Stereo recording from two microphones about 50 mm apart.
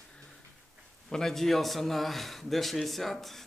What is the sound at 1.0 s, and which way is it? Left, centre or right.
A man's voice, centre.